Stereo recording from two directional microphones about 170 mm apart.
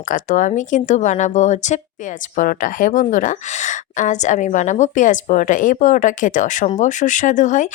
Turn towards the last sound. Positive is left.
turn(degrees=50)  # may be behind; listen again after turning